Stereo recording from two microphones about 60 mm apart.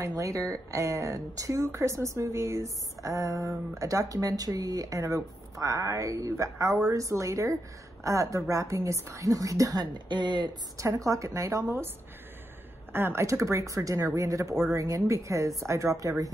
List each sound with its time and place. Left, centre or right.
0.0 s speech: right
10.8 s speech: right
12.9 s speech: right